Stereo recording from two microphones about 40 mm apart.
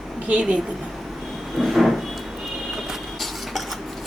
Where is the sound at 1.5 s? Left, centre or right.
Centre.